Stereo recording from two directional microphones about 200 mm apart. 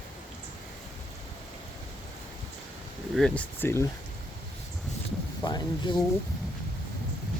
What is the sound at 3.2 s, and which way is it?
Speech, 5° left (ahead or behind).